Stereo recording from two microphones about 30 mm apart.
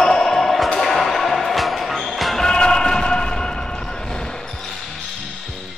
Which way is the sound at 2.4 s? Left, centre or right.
Left.